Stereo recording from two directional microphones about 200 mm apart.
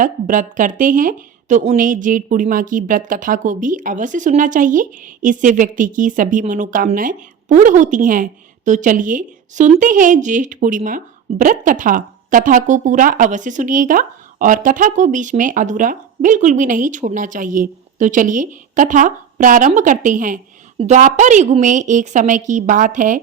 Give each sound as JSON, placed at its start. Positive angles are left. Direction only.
{"t": 0.0, "sound": "speech", "side_deg": -40}